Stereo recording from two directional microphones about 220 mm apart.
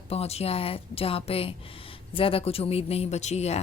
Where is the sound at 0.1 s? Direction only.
30° left (ahead or behind).